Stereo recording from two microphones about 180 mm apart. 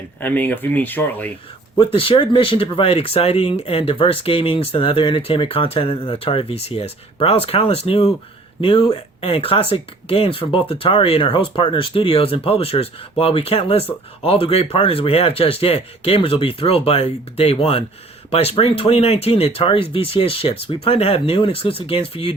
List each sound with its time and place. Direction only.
0.2 s speech: 10° left (ahead or behind)
1.8 s speech: 30° left (ahead or behind)